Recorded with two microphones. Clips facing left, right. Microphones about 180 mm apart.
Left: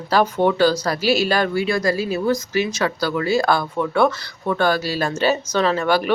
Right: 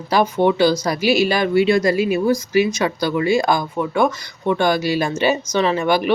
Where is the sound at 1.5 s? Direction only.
25° right (ahead or behind).